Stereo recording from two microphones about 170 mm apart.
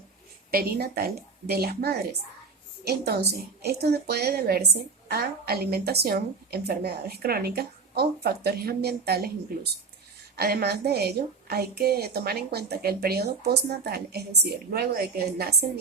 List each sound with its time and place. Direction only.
0.5 s a woman's voice: 65° right (ahead or behind)
10.3 s a woman's voice: 70° right (ahead or behind)